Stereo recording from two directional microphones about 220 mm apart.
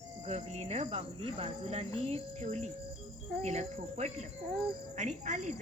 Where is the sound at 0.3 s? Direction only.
30° right (ahead or behind).